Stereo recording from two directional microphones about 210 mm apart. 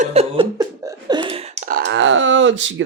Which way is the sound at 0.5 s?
15° right (ahead or behind).